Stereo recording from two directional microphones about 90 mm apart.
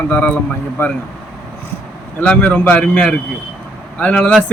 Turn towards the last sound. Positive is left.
turn(degrees=15)  # may be behind; listen again after turning